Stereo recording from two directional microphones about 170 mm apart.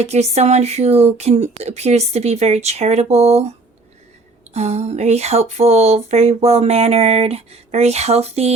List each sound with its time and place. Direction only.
0.0 s speech: 40° right (ahead or behind)
4.5 s speech: 40° right (ahead or behind)